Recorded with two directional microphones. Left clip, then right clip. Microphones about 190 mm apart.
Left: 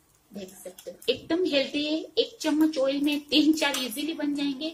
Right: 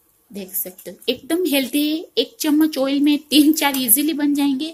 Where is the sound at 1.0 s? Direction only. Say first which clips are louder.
Right 5 dB; 50° right (ahead or behind).